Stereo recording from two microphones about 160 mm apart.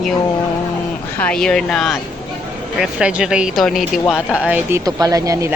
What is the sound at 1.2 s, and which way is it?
Speech, 5° left (ahead or behind).